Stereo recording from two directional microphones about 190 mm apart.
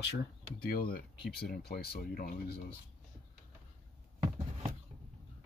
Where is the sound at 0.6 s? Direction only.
55° left (ahead or behind).